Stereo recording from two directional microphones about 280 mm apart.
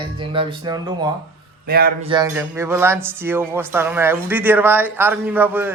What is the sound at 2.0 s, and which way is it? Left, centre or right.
Speech, centre.